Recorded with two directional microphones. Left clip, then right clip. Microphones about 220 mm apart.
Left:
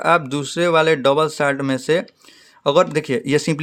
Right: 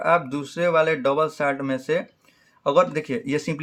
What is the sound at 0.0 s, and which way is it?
Speech, 45° left (ahead or behind).